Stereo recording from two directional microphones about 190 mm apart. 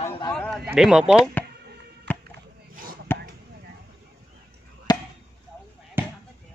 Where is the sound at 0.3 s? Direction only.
5° left (ahead or behind).